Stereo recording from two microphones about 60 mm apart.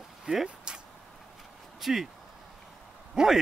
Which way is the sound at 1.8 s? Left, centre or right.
Centre.